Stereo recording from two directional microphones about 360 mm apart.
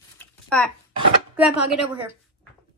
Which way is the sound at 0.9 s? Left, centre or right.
Centre.